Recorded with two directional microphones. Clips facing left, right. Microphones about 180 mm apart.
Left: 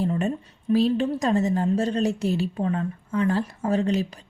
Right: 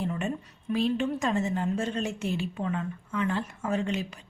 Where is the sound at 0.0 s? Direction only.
35° left (ahead or behind).